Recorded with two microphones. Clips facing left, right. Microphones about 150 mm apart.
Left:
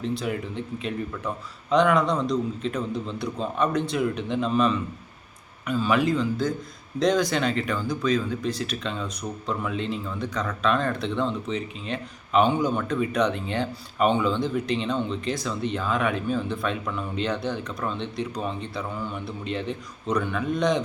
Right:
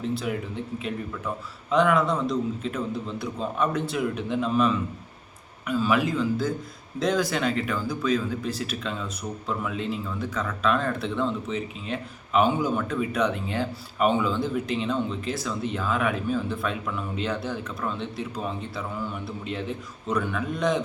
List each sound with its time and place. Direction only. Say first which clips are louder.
0.0 s a man's voice: even; 5° right (ahead or behind)